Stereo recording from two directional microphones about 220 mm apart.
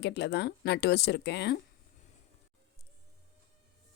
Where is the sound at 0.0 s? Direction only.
50° left (ahead or behind).